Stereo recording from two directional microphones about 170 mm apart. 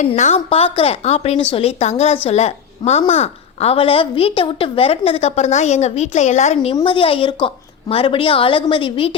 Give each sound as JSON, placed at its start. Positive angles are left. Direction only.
{"t": 0.2, "sound": "a woman's voice", "side_deg": 40}